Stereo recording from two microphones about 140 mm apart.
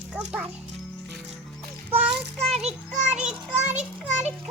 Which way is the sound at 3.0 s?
60° right (ahead or behind).